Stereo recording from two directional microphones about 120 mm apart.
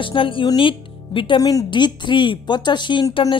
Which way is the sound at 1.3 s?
30° left (ahead or behind).